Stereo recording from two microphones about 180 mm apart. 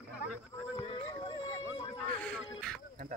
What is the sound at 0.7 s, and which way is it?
Music, 30° left (ahead or behind).